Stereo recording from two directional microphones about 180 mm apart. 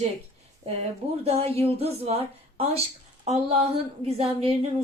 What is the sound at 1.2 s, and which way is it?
Speech, 35° right (ahead or behind).